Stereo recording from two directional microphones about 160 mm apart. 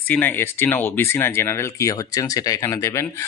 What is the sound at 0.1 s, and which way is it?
Speech, 10° left (ahead or behind).